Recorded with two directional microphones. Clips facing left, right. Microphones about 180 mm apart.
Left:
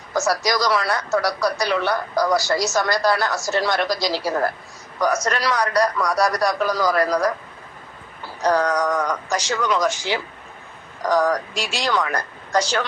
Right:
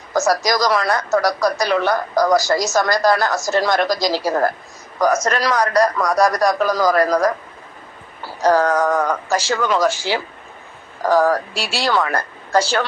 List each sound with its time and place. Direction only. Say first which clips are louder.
0.1 s speech: right 3 dB; 45° right (ahead or behind)
8.4 s speech: right 4 dB; 45° right (ahead or behind)
9.7 s speech: right 3 dB; 35° right (ahead or behind)